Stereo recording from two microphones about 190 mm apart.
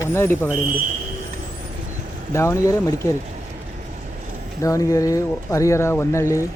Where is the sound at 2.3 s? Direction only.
15° left (ahead or behind).